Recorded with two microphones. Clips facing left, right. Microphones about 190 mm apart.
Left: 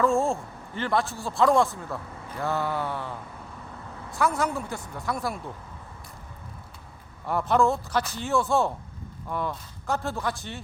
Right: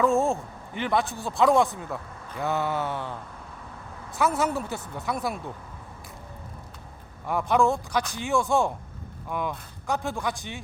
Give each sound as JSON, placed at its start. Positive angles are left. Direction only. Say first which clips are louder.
{"t": 0.1, "sound": "a man's voice", "louder": "right 1 dB", "side_deg": -15}
{"t": 2.4, "sound": "mantra", "louder": "right 1 dB", "side_deg": -20}
{"t": 4.2, "sound": "mantra", "louder": "right 1 dB", "side_deg": -25}
{"t": 4.5, "sound": "speech", "louder": "right 2 dB", "side_deg": -5}
{"t": 5.1, "sound": "mantra", "louder": "right 1 dB", "side_deg": -20}
{"t": 7.3, "sound": "a man's voice", "louder": "even", "side_deg": -10}